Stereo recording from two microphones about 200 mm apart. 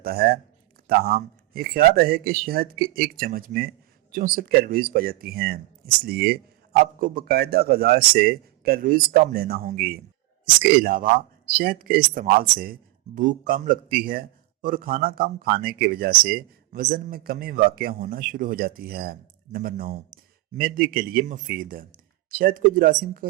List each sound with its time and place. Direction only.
0.0 s a man's voice: 50° right (ahead or behind)